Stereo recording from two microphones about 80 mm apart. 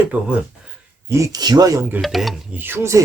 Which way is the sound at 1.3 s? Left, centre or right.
Right.